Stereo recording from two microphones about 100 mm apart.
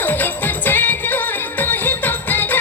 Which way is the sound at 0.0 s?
20° left (ahead or behind).